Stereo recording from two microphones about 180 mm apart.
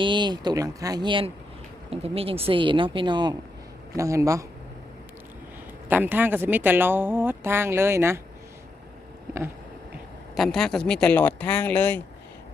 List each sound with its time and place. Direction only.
0.0 s a woman's voice: 25° right (ahead or behind)
5.9 s a woman's voice: 10° right (ahead or behind)
10.3 s speech: centre (ahead or behind)